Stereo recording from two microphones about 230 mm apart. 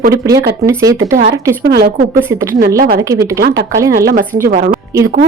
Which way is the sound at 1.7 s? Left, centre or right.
Right.